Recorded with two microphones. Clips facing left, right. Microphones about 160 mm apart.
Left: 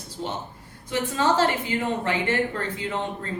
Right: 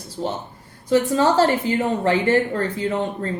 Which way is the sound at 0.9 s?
40° right (ahead or behind).